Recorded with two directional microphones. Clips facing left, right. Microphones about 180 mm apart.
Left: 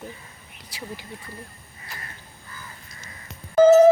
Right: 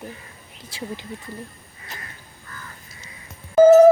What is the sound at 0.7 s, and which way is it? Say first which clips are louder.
Speech: right 4 dB; 25° right (ahead or behind).